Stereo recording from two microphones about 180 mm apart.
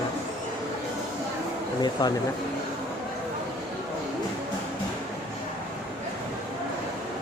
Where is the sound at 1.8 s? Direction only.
25° left (ahead or behind).